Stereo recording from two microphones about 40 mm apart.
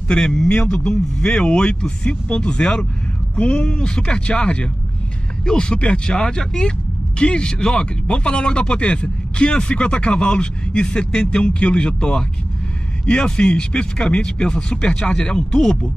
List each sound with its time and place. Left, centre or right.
0.1 s speech: centre